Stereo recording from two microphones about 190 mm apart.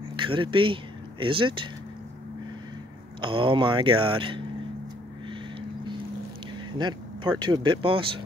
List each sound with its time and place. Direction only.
0.1 s speech: 25° right (ahead or behind)
3.2 s speech: 25° right (ahead or behind)
6.8 s speech: 25° right (ahead or behind)